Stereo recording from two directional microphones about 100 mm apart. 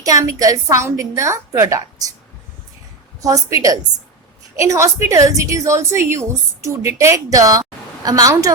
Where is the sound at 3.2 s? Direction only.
35° right (ahead or behind).